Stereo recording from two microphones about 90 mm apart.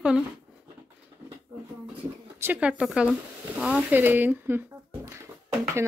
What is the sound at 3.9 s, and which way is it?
Speech, 20° right (ahead or behind).